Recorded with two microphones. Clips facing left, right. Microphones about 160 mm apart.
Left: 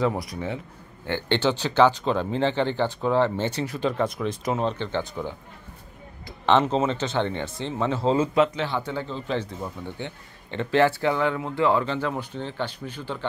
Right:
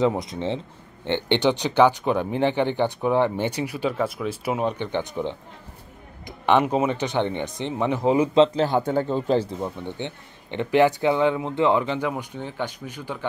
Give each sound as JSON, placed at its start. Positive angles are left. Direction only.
{"t": 0.0, "sound": "speech", "side_deg": -20}
{"t": 8.4, "sound": "speech", "side_deg": -40}
{"t": 9.4, "sound": "speech", "side_deg": -30}